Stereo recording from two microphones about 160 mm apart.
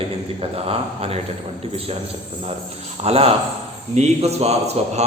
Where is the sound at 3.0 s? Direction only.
40° right (ahead or behind).